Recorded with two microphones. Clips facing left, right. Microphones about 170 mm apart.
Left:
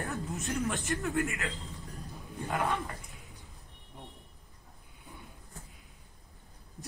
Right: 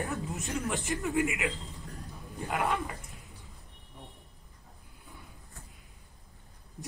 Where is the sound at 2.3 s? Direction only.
Centre (ahead or behind).